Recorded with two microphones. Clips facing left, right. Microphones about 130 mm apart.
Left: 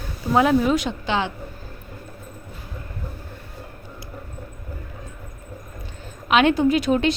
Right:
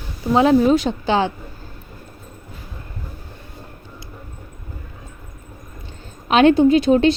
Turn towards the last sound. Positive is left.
turn(degrees=-30)  # may be behind; listen again after turning